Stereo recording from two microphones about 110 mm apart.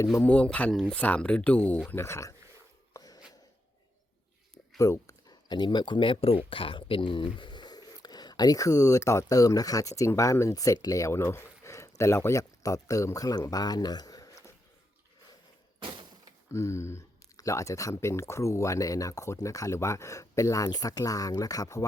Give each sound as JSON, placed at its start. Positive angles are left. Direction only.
{"t": 0.2, "sound": "speech", "side_deg": 10}
{"t": 0.9, "sound": "speech", "side_deg": 15}
{"t": 1.9, "sound": "speech", "side_deg": 25}
{"t": 2.9, "sound": "a sound", "side_deg": 35}
{"t": 4.8, "sound": "speech", "side_deg": 30}
{"t": 16.5, "sound": "speech", "side_deg": 25}